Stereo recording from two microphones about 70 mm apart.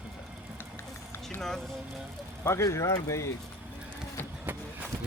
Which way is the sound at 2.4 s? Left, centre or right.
Left.